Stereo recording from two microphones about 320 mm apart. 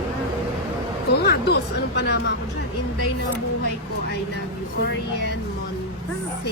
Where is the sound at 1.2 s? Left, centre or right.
Left.